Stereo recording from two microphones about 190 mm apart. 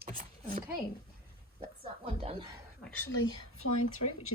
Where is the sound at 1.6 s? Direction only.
30° right (ahead or behind).